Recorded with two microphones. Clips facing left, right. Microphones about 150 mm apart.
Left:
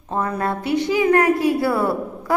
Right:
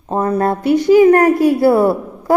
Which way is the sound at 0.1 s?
35° right (ahead or behind).